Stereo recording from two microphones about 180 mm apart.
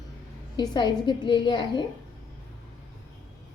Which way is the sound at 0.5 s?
25° left (ahead or behind).